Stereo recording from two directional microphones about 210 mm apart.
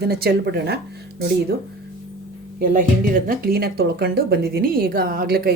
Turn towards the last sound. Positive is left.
turn(degrees=-45)  # may be behind; listen again after turning